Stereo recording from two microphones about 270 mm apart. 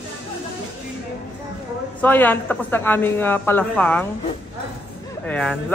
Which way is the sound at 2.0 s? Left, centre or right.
Centre.